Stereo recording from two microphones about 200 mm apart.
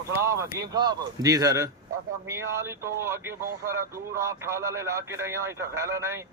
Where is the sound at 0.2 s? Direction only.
15° right (ahead or behind).